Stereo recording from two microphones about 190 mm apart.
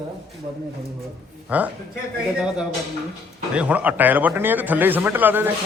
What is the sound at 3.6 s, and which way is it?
A man's voice, 10° right (ahead or behind).